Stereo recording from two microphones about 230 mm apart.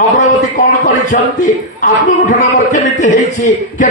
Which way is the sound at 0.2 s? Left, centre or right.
Left.